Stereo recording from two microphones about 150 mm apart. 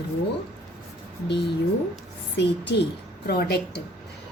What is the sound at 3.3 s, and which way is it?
Speech, 90° left.